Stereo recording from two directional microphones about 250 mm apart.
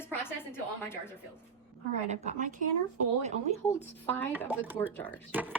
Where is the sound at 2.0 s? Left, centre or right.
Right.